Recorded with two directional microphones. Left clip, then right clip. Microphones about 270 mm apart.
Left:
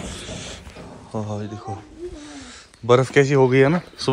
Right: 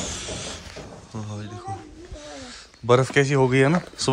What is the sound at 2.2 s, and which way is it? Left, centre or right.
Speech, centre.